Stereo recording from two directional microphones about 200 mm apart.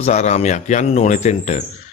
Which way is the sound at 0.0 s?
35° left (ahead or behind).